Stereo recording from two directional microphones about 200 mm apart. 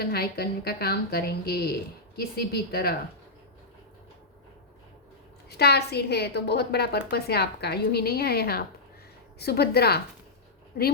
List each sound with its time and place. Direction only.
0.0 s a woman's voice: 50° left (ahead or behind)
5.5 s a woman's voice: 55° left (ahead or behind)